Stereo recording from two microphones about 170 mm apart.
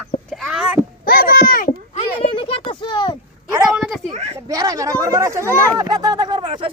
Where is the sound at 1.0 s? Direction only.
60° left (ahead or behind).